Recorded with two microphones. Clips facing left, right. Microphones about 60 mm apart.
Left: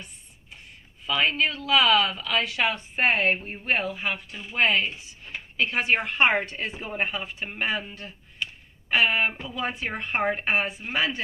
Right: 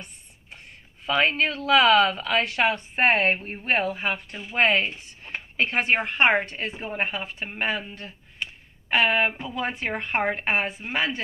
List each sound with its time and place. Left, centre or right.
1.0 s speech: right
9.0 s speech: right
9.6 s speech: right